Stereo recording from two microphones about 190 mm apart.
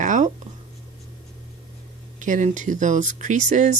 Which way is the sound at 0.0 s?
40° right (ahead or behind).